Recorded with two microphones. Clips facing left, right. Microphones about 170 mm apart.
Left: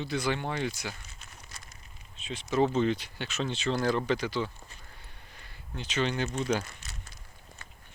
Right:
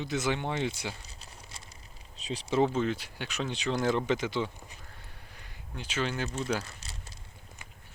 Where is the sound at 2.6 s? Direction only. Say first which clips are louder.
Left 4 dB; 5° right (ahead or behind).